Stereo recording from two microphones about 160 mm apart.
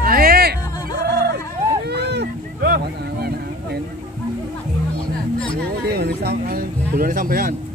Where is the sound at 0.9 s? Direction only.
75° right (ahead or behind).